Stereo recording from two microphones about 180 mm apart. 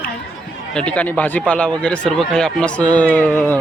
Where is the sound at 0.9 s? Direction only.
10° left (ahead or behind).